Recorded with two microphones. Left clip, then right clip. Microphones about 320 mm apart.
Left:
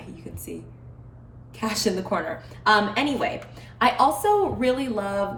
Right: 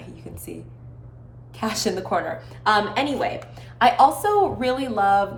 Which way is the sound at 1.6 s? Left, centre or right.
Centre.